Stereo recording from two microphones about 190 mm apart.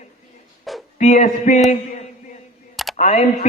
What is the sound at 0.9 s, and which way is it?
Speech, 40° left (ahead or behind).